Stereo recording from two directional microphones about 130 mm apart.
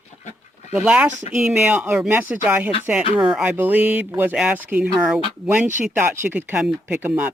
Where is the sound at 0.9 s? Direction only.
5° right (ahead or behind).